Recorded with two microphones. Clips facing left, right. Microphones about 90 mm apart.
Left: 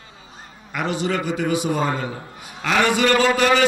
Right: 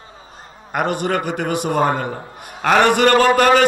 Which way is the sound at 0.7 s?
50° right (ahead or behind).